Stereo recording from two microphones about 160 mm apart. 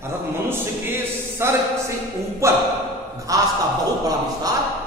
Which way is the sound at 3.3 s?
20° right (ahead or behind).